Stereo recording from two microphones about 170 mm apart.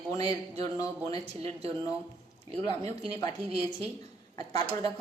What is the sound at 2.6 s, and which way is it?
A woman's voice, 20° left (ahead or behind).